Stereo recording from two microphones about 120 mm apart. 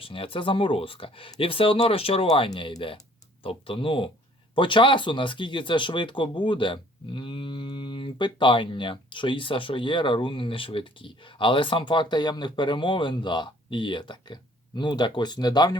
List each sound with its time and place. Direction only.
0.0 s speech: 50° left (ahead or behind)
2.5 s speech: 40° left (ahead or behind)